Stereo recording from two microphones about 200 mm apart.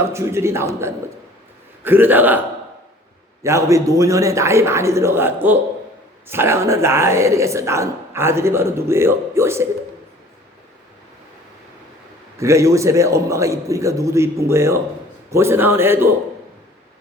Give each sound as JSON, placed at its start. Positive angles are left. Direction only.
{"t": 0.0, "sound": "speech", "side_deg": -15}
{"t": 3.4, "sound": "speech", "side_deg": -15}
{"t": 12.4, "sound": "speech", "side_deg": -15}